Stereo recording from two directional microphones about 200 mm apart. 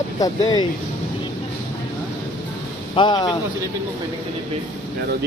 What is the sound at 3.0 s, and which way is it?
Speech, 20° left (ahead or behind).